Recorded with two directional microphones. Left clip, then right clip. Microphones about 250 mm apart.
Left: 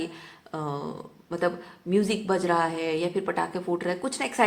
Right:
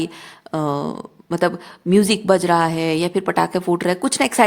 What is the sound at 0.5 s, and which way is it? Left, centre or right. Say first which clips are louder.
Speech: right 10 dB; right.